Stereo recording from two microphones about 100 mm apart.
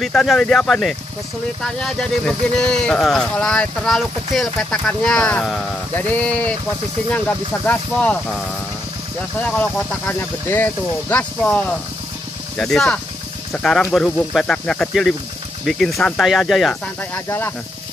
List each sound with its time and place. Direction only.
0.0 s speech: centre (ahead or behind)
5.9 s speech: 15° left (ahead or behind)
9.5 s speech: 15° left (ahead or behind)